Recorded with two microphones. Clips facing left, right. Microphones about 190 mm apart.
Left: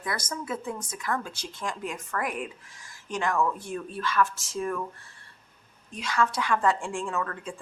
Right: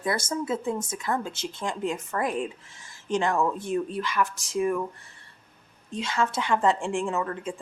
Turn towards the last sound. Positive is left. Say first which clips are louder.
# right 3 dB
turn(degrees=-20)  # may be behind; listen again after turning